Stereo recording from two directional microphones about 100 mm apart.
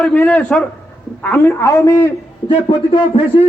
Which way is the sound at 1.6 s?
30° left (ahead or behind).